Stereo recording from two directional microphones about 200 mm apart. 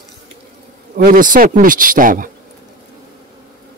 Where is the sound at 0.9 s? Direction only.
45° right (ahead or behind).